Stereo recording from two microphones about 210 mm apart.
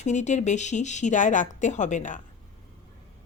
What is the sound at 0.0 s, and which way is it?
Speech, 35° left (ahead or behind).